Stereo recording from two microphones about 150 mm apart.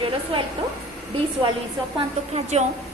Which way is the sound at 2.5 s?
45° right (ahead or behind).